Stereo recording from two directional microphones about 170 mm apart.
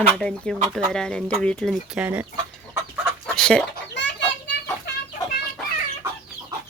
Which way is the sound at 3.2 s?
5° left (ahead or behind).